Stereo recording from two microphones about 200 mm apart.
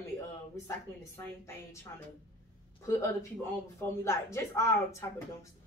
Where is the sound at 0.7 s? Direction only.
15° left (ahead or behind).